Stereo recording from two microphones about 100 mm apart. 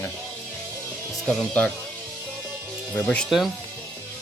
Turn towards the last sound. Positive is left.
turn(degrees=15)  # may be behind; listen again after turning